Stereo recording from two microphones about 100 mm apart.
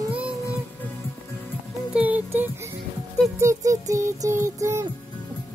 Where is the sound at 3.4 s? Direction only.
30° right (ahead or behind).